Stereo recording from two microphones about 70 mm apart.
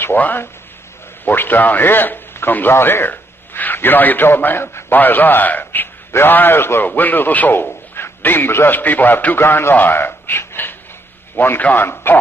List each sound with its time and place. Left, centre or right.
0.0 s a man's voice: left